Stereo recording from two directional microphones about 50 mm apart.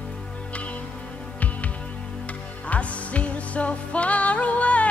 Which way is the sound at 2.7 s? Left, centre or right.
Left.